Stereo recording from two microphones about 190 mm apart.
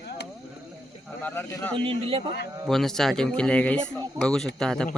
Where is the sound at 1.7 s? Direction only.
30° right (ahead or behind).